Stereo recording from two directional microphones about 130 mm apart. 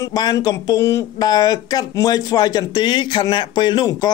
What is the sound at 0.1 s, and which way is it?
Speech, 30° left (ahead or behind).